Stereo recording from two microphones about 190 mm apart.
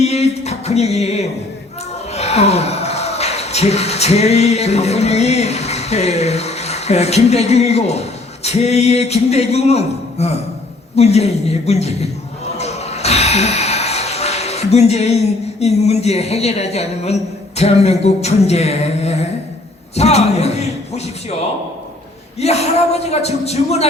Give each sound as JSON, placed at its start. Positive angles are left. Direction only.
{"t": 0.0, "sound": "a sound", "side_deg": 35}
{"t": 2.1, "sound": "speech", "side_deg": 35}
{"t": 12.5, "sound": "music", "side_deg": 35}
{"t": 15.6, "sound": "speech", "side_deg": 35}
{"t": 22.4, "sound": "speech", "side_deg": 35}